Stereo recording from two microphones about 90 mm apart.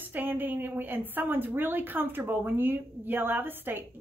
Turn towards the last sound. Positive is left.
turn(degrees=-20)  # may be behind; listen again after turning